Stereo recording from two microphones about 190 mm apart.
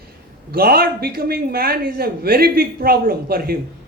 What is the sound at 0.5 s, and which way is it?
A man's voice, 55° right (ahead or behind).